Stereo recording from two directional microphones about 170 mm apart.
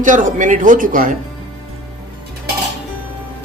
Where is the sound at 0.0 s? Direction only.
50° right (ahead or behind).